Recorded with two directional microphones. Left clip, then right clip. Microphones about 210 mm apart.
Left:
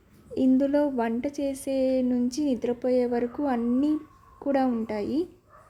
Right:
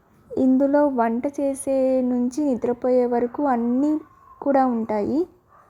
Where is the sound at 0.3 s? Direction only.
20° right (ahead or behind).